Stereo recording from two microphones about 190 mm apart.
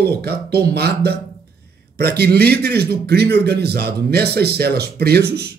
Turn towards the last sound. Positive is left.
turn(degrees=-55)  # may be behind; listen again after turning